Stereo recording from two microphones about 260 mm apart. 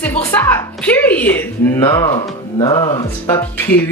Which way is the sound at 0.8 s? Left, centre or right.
Centre.